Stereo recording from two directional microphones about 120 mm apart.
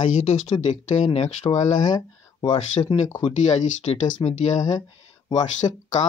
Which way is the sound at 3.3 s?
70° left (ahead or behind).